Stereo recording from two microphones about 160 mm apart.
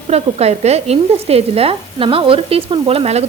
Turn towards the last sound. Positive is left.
turn(degrees=-40)  # may be behind; listen again after turning